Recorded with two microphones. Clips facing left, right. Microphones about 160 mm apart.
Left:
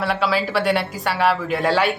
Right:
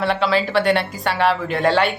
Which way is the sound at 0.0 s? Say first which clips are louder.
Right 2 dB; 5° left (ahead or behind).